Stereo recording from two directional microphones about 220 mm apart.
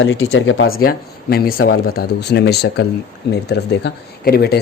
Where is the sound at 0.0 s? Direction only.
60° left (ahead or behind).